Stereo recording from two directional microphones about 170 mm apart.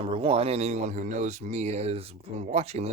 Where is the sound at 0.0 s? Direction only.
30° right (ahead or behind).